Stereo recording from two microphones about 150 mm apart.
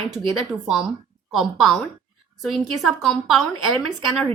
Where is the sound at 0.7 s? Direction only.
Centre (ahead or behind).